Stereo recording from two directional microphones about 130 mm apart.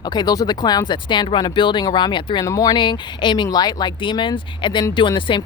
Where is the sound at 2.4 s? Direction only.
25° left (ahead or behind).